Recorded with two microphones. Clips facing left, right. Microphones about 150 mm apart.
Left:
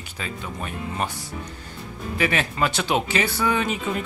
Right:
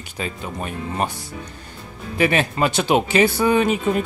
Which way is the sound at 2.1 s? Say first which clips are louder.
Right 5 dB; 25° right (ahead or behind).